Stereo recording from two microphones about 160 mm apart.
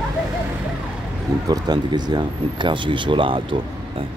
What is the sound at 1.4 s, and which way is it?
Speech, 25° right (ahead or behind).